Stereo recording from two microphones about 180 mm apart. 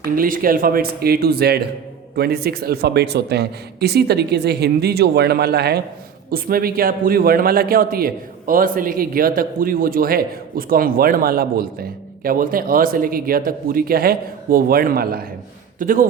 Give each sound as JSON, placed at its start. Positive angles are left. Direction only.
{"t": 0.0, "sound": "a man's voice", "side_deg": -50}